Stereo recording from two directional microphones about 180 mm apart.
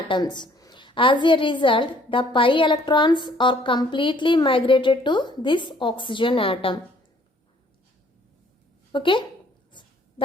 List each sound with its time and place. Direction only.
0.1 s a woman's voice: 25° left (ahead or behind)
8.9 s a woman's voice: 25° left (ahead or behind)
9.7 s a sound: 25° left (ahead or behind)